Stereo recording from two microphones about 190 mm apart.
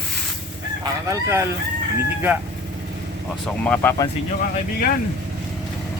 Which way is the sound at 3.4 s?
5° left (ahead or behind).